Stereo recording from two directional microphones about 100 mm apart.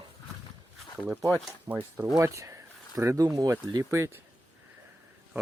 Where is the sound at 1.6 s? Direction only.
20° right (ahead or behind).